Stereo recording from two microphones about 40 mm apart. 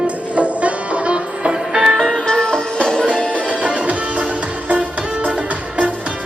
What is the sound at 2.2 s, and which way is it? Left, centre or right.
Music, centre.